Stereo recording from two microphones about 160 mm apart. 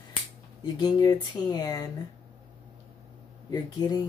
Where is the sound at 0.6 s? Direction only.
25° left (ahead or behind).